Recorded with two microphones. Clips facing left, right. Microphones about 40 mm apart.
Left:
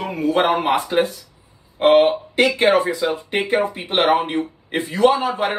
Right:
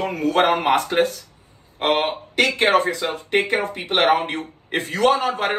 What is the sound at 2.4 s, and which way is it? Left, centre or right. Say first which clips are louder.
Speech: left 1 dB; right.